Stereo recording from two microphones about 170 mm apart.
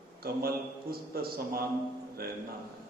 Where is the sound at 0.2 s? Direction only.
65° right (ahead or behind).